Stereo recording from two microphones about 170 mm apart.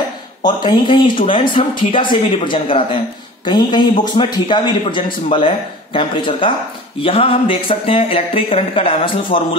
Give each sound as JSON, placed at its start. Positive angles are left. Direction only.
{"t": 0.4, "sound": "speech", "side_deg": 25}